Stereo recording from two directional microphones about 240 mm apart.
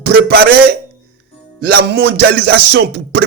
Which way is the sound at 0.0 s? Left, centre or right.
Right.